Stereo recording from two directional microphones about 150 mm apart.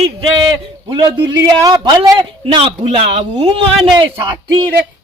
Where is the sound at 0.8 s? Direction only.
30° right (ahead or behind).